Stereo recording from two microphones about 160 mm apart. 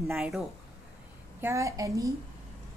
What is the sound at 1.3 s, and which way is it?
Speech, 15° right (ahead or behind).